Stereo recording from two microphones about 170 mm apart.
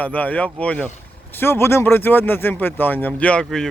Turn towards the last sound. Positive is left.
turn(degrees=5)  # may be behind; listen again after turning